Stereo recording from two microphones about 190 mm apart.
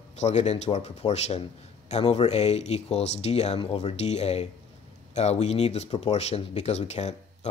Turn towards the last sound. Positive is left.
turn(degrees=35)  # may be behind; listen again after turning